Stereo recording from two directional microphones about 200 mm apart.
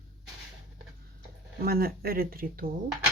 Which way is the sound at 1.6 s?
50° right (ahead or behind).